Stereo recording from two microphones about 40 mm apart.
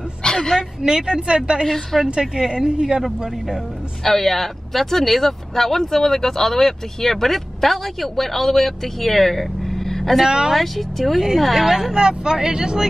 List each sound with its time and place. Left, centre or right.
0.2 s speech: centre
0.8 s a woman's voice: centre
1.7 s speech: centre
2.0 s a woman's voice: centre
4.0 s speech: centre
10.2 s speech: centre
10.5 s speech: centre
11.9 s speech: centre